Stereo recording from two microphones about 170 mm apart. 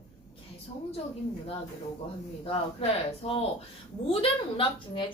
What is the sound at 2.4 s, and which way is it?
A woman's voice, 35° left (ahead or behind).